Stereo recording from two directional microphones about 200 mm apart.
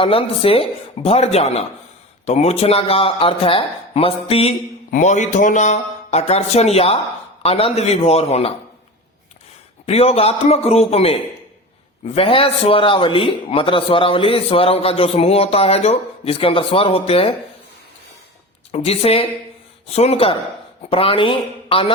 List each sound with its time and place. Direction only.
0.0 s a man's voice: 25° left (ahead or behind)
9.8 s a man's voice: 30° left (ahead or behind)
18.7 s a man's voice: 30° left (ahead or behind)